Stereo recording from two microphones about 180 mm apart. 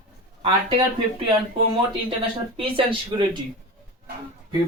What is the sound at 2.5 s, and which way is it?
Speech, 30° right (ahead or behind).